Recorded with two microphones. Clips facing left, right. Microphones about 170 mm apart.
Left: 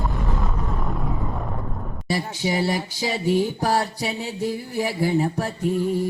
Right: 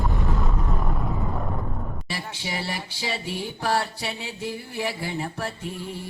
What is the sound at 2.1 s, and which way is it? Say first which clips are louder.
Music: left 10 dB; 40° left (ahead or behind).